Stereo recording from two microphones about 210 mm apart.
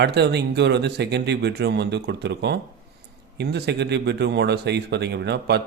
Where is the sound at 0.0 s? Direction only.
55° right (ahead or behind).